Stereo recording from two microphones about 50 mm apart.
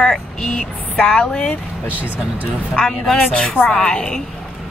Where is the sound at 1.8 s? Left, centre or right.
Right.